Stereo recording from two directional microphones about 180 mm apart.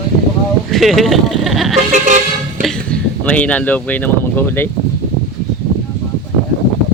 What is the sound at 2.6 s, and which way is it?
Music, centre (ahead or behind).